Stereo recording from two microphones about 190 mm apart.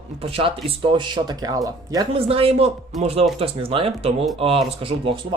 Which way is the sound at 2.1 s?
30° right (ahead or behind).